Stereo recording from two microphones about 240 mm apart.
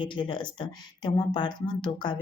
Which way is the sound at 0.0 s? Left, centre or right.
Centre.